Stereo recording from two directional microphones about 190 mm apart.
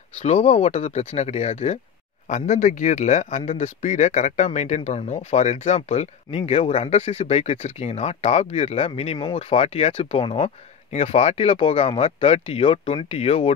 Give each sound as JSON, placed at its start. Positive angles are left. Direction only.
{"t": 0.2, "sound": "speech", "side_deg": 35}